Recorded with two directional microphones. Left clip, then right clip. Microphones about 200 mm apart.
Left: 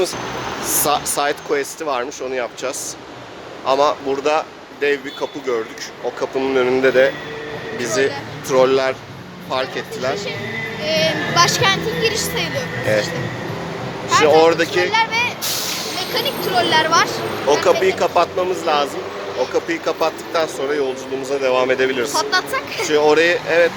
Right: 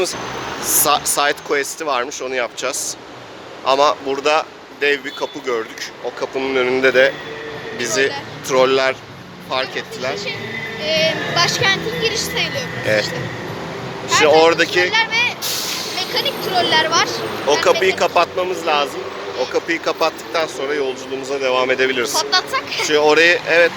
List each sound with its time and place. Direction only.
0.6 s speech: centre (ahead or behind)
10.8 s a sound: 65° left (ahead or behind)
12.8 s speech: centre (ahead or behind)
14.1 s speech: centre (ahead or behind)
14.8 s speech: 55° left (ahead or behind)
17.5 s speech: 5° left (ahead or behind)
22.1 s speech: 50° left (ahead or behind)
22.9 s speech: centre (ahead or behind)